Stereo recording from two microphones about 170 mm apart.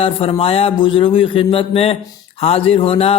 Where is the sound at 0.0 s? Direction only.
30° left (ahead or behind).